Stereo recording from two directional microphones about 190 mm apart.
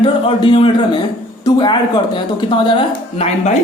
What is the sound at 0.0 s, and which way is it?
A woman's voice, 25° left (ahead or behind).